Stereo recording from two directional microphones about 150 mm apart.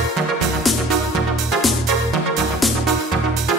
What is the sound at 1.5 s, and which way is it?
Music, centre (ahead or behind).